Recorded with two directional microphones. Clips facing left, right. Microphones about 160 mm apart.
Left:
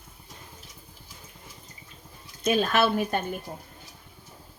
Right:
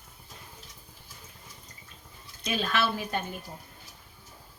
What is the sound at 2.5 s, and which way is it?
Speech, 50° left (ahead or behind).